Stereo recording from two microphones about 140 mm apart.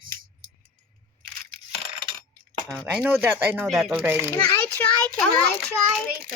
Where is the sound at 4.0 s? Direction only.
15° right (ahead or behind).